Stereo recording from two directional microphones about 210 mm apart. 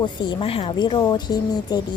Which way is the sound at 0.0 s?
20° left (ahead or behind).